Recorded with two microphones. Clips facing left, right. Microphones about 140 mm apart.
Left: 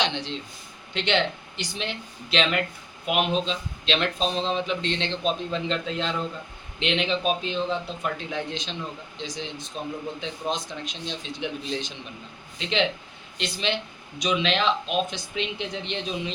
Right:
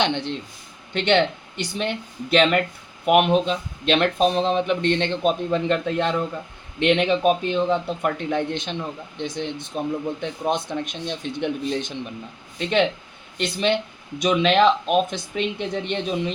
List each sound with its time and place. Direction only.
0.0 s speech: 55° right (ahead or behind)
13.3 s speech: 50° right (ahead or behind)